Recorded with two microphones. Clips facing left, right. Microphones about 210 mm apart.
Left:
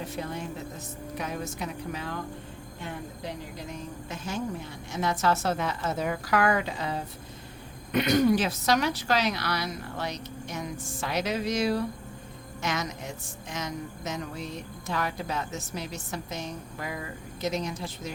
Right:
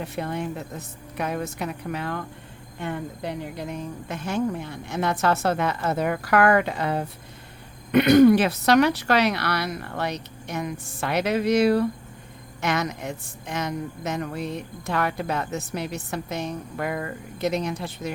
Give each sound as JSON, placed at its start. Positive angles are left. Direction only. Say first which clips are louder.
{"t": 0.0, "sound": "speech", "louder": "right 5 dB", "side_deg": -60}